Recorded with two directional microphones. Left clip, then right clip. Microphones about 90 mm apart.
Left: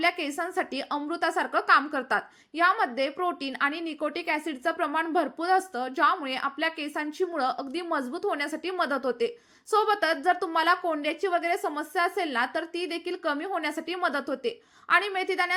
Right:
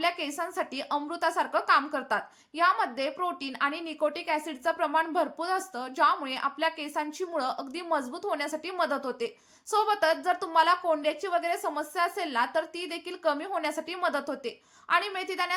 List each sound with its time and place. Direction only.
0.0 s a woman's voice: 25° left (ahead or behind)